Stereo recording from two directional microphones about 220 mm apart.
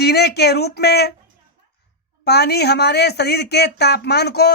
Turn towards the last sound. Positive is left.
turn(degrees=45)  # may be behind; listen again after turning